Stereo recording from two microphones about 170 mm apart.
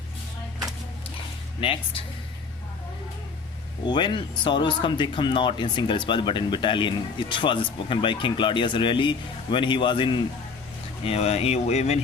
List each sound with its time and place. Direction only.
1.6 s speech: 30° left (ahead or behind)
3.8 s speech: 25° left (ahead or behind)